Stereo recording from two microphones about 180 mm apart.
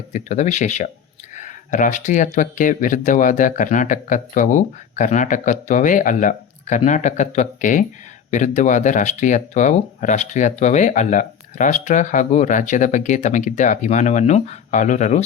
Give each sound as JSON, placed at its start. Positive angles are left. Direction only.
{"t": 0.1, "sound": "speech", "side_deg": 40}